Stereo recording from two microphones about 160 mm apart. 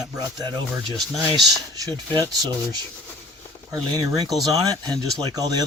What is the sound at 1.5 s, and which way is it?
Speech, 25° right (ahead or behind).